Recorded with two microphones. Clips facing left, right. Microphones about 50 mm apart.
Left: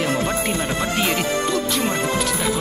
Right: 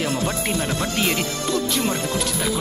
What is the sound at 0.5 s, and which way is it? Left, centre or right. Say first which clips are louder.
Speech: left 1 dB; centre.